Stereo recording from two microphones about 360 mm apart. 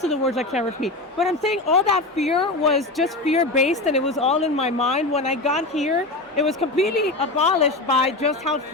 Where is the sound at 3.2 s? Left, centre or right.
Centre.